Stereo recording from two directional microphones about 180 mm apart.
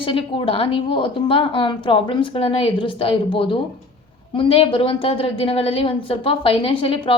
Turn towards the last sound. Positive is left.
turn(degrees=30)  # may be behind; listen again after turning